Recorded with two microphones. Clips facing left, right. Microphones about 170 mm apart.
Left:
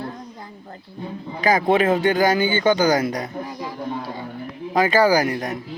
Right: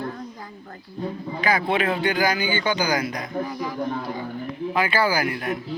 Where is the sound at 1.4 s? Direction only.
40° left (ahead or behind).